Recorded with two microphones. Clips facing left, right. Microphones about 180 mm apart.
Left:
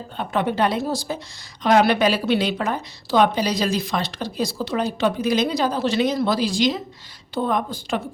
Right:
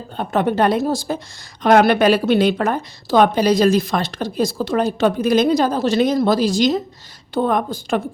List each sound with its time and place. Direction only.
0.2 s a woman's voice: 45° right (ahead or behind)